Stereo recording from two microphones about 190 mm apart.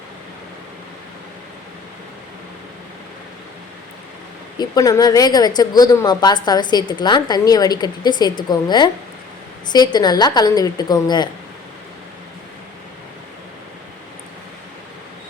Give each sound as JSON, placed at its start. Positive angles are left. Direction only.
{"t": 4.5, "sound": "a woman's voice", "side_deg": 20}